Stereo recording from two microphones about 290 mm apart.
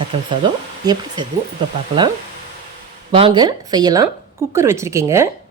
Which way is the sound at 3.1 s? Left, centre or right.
Centre.